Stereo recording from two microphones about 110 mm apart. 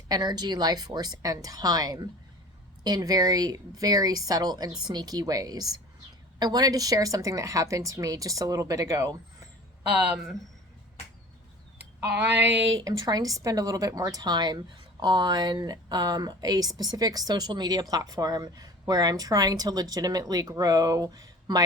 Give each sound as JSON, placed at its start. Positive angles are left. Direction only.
{"t": 0.1, "sound": "speech", "side_deg": -40}
{"t": 9.9, "sound": "speech", "side_deg": -10}
{"t": 12.8, "sound": "speech", "side_deg": -35}